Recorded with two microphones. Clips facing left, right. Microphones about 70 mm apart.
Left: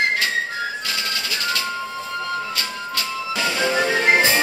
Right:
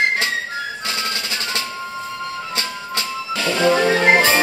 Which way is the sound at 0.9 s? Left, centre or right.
Right.